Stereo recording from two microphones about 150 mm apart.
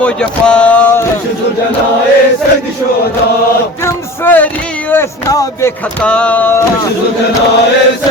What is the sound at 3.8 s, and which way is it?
Speech, 10° left (ahead or behind).